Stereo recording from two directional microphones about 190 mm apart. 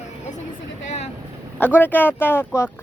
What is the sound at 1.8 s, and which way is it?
Speech, 10° left (ahead or behind).